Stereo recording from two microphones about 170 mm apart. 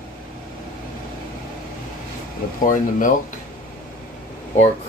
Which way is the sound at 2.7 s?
50° left (ahead or behind).